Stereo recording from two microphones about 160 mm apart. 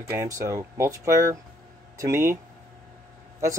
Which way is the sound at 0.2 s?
20° right (ahead or behind).